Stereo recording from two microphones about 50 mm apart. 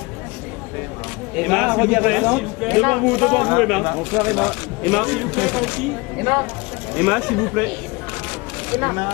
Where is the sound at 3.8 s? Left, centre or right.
Right.